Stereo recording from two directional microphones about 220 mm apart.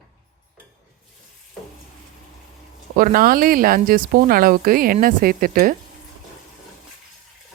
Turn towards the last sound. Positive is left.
turn(degrees=-40)  # may be behind; listen again after turning